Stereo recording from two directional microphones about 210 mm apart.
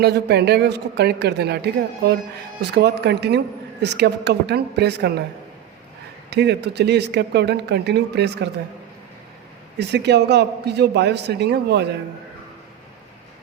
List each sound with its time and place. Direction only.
0.0 s a woman's voice: 50° right (ahead or behind)
6.3 s a woman's voice: 55° right (ahead or behind)
9.7 s a woman's voice: 55° right (ahead or behind)